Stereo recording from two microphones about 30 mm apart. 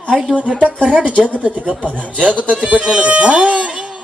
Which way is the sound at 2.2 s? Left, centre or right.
Right.